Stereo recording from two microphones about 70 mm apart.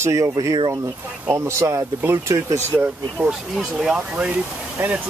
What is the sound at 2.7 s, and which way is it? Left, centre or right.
Speech, right.